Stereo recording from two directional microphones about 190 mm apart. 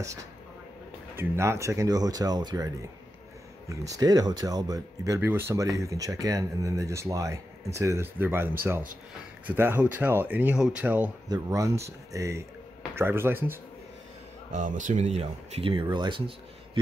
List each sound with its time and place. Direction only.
0.0 s speech: 15° right (ahead or behind)
11.2 s speech: 20° right (ahead or behind)
14.5 s speech: 40° right (ahead or behind); by 16.8 s 25° right (ahead or behind)